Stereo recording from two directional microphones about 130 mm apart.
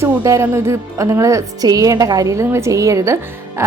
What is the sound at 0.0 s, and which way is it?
A woman's voice, 25° right (ahead or behind).